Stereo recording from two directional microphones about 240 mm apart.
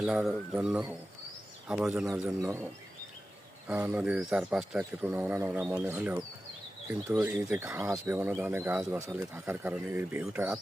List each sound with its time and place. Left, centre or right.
0.0 s speech: centre
3.7 s speech: centre